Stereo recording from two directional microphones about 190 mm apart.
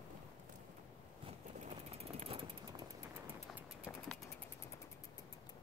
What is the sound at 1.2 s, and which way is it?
Vehicle, 30° right (ahead or behind).